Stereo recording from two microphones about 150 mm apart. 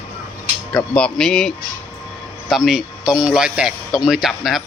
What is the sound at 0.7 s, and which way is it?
Speech, 5° left (ahead or behind).